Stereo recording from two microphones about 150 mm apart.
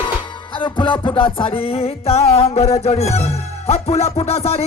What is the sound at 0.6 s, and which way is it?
Music, 35° left (ahead or behind).